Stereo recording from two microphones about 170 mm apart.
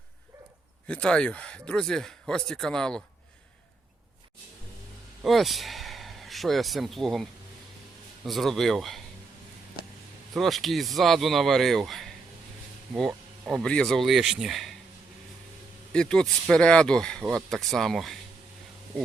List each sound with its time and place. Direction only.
0.9 s speech: 5° left (ahead or behind)
5.2 s speech: centre (ahead or behind)
10.3 s speech: centre (ahead or behind)
15.9 s speech: 5° left (ahead or behind)